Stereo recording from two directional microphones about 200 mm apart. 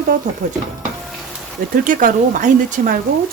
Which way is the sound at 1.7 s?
40° right (ahead or behind).